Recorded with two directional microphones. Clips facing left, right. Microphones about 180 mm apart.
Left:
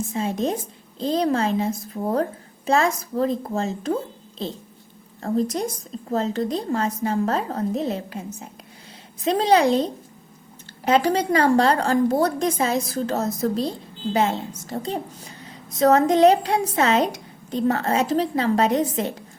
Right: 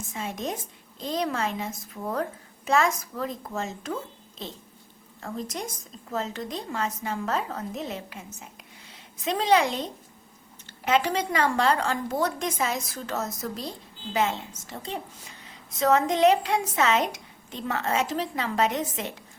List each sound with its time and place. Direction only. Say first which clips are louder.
0.1 s a woman's voice: left 6 dB; 30° left (ahead or behind)